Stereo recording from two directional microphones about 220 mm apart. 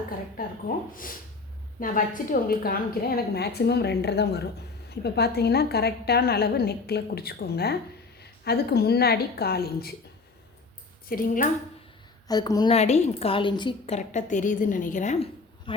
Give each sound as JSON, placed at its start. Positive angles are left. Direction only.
{"t": 1.8, "sound": "a woman's voice", "side_deg": 40}
{"t": 11.1, "sound": "a woman's voice", "side_deg": 40}
{"t": 12.3, "sound": "a woman's voice", "side_deg": 15}